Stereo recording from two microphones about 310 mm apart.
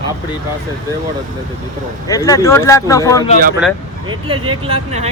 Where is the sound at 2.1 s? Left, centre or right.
Centre.